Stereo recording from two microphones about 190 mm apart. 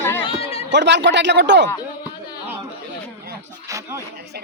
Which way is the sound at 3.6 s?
15° right (ahead or behind).